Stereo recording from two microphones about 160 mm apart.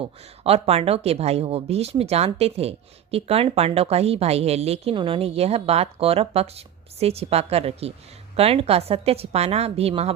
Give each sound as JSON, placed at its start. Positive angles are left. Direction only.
{"t": 0.0, "sound": "speech", "side_deg": -40}